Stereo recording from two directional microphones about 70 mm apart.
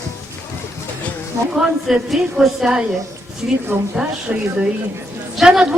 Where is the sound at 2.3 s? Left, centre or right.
Centre.